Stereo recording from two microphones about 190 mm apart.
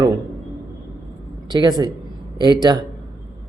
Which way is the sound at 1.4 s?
20° right (ahead or behind).